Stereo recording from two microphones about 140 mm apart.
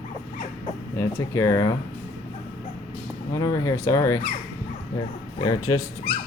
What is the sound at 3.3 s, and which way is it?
Speech, 25° left (ahead or behind).